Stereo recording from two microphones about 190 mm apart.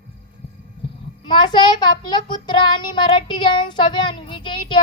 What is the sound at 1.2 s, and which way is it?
Speech, 25° left (ahead or behind).